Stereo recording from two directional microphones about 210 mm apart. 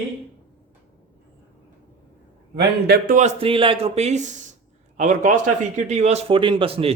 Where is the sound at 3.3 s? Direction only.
25° right (ahead or behind).